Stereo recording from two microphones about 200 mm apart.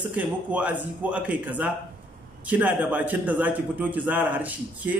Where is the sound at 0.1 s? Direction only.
5° right (ahead or behind).